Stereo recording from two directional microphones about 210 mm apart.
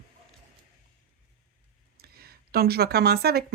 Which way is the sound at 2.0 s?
45° right (ahead or behind).